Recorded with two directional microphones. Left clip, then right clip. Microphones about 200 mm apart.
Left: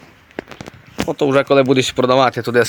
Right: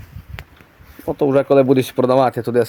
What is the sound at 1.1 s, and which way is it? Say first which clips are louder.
Speech: even; 5° right (ahead or behind).